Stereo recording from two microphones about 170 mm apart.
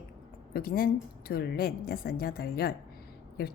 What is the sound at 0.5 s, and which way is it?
A woman's voice, 60° left (ahead or behind).